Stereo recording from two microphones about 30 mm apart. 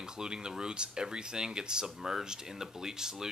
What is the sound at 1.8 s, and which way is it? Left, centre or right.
Speech, centre.